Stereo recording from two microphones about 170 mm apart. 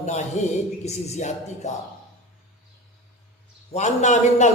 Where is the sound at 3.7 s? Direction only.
45° left (ahead or behind).